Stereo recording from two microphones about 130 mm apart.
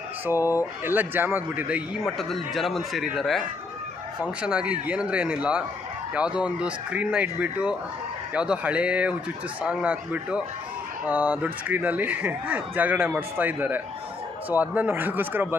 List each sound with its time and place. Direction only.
0.3 s speech: 15° right (ahead or behind)
2.0 s speech: centre (ahead or behind)
4.4 s speech: 10° right (ahead or behind)